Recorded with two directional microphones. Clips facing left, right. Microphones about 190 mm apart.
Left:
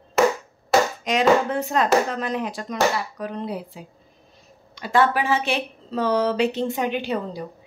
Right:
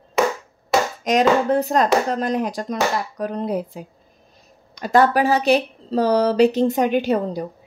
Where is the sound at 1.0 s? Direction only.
40° right (ahead or behind).